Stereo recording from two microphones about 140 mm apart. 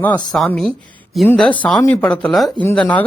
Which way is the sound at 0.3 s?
5° left (ahead or behind).